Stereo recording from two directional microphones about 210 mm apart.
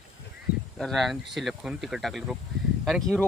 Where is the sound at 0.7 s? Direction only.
Centre (ahead or behind).